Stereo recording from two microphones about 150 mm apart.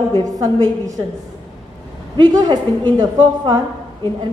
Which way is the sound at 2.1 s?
25° right (ahead or behind).